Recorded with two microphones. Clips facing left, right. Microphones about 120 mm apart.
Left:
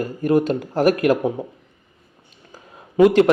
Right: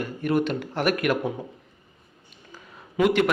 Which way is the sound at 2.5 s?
35° left (ahead or behind).